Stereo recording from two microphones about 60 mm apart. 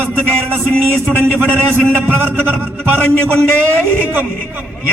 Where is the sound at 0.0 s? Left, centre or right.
Right.